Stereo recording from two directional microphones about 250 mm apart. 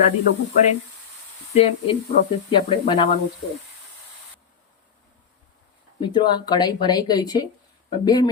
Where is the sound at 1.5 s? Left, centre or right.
Left.